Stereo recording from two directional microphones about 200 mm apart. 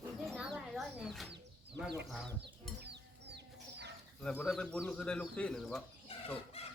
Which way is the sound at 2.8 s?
55° right (ahead or behind).